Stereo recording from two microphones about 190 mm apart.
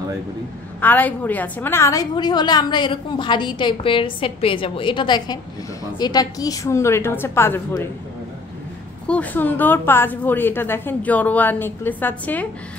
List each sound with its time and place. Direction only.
0.7 s a woman's voice: 10° left (ahead or behind)
9.0 s a woman's voice: 5° left (ahead or behind)